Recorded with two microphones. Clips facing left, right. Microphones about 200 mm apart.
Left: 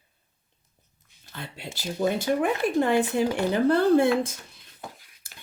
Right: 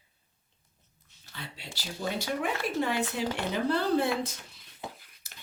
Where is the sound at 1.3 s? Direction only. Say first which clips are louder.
Left 5 dB; 50° left (ahead or behind).